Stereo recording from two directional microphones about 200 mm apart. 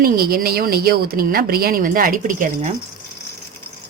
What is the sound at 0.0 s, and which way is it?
A woman's voice, 45° right (ahead or behind).